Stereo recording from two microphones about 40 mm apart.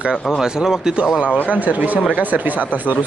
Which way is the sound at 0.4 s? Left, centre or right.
Centre.